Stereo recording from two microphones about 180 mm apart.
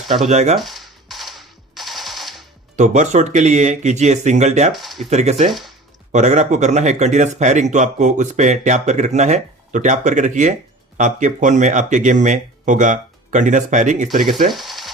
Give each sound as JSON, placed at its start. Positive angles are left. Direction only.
{"t": 0.3, "sound": "speech", "side_deg": -40}
{"t": 0.5, "sound": "a sound", "side_deg": 0}
{"t": 2.7, "sound": "speech", "side_deg": -40}
{"t": 4.7, "sound": "speech", "side_deg": 0}
{"t": 5.0, "sound": "speech", "side_deg": -40}
{"t": 5.5, "sound": "speech", "side_deg": 0}
{"t": 6.1, "sound": "speech", "side_deg": -40}
{"t": 14.5, "sound": "a sound", "side_deg": 0}